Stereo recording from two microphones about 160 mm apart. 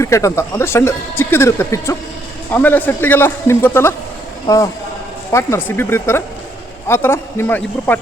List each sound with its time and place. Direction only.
0.0 s a man's voice: 20° left (ahead or behind)